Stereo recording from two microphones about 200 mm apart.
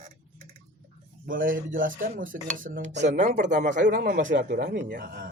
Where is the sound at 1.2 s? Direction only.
45° right (ahead or behind).